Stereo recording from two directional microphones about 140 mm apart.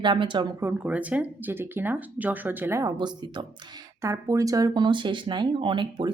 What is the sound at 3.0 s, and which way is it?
A woman's voice, 30° right (ahead or behind).